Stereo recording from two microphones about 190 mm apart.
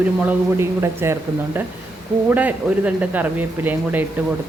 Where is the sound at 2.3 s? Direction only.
10° right (ahead or behind).